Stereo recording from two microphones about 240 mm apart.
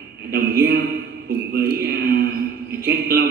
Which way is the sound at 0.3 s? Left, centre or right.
Right.